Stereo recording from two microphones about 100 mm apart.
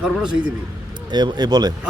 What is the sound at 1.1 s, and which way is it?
Speech, 45° right (ahead or behind).